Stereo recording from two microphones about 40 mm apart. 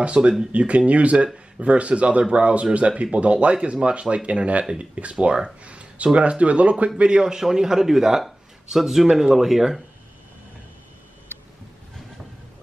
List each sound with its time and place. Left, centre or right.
0.0 s a man's voice: right
5.6 s a sound: right
6.1 s speech: right
7.0 s a man's voice: right; by 9.8 s centre